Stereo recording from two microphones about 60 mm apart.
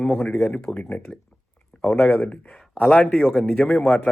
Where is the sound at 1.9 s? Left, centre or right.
Left.